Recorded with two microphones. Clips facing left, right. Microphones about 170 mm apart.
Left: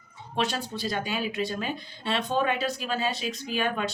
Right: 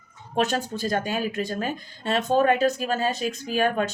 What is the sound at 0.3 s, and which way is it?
Speech, 45° right (ahead or behind).